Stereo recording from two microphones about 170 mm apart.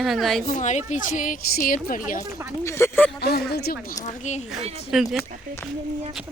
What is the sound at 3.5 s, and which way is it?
Speech, 65° left (ahead or behind).